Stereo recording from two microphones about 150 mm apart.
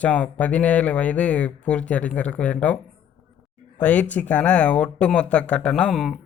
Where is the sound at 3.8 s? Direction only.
10° left (ahead or behind).